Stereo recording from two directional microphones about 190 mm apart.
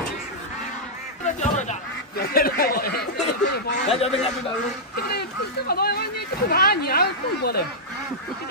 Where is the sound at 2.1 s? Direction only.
50° left (ahead or behind).